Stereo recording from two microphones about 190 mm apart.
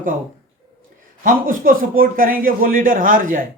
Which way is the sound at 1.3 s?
45° right (ahead or behind).